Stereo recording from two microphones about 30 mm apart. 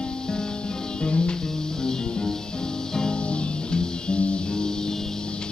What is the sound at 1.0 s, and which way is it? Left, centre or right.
Music, left.